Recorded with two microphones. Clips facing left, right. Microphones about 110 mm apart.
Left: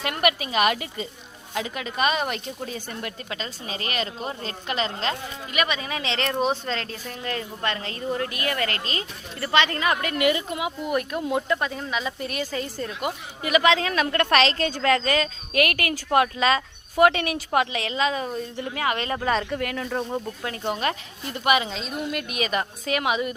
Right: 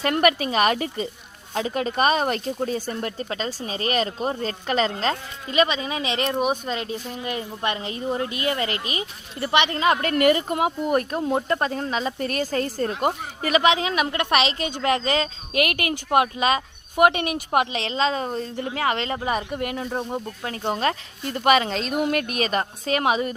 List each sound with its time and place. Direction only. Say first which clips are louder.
0.0 s speech: right 4 dB; 40° right (ahead or behind); by 10.0 s 25° right (ahead or behind)
10.0 s speech: right 4 dB; 45° right (ahead or behind)
13.6 s speech: even; 20° right (ahead or behind)
19.2 s speech: left 1 dB; 15° right (ahead or behind)
20.4 s a woman's voice: right 4 dB; 35° right (ahead or behind)
21.7 s speech: right 6 dB; 70° right (ahead or behind)
22.4 s speech: right 2 dB; 35° right (ahead or behind)